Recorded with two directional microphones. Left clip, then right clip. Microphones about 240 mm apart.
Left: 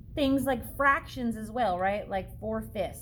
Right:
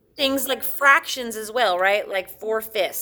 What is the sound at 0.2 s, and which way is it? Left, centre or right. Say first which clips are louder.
A woman's voice: right 5 dB; right.